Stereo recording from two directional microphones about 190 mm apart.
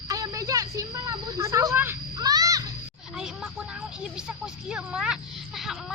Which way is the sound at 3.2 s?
5° right (ahead or behind).